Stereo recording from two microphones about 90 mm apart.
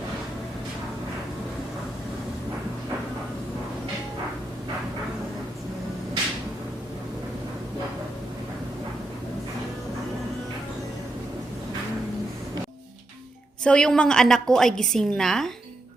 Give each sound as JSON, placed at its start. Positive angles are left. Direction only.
{"t": 13.7, "sound": "a woman's voice", "side_deg": 10}